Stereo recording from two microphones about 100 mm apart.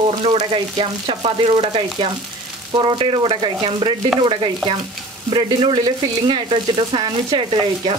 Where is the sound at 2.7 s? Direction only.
50° right (ahead or behind).